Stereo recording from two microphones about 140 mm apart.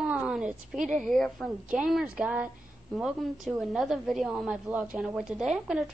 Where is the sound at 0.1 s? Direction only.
10° right (ahead or behind).